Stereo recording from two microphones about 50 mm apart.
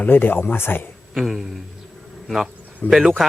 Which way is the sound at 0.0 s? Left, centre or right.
Left.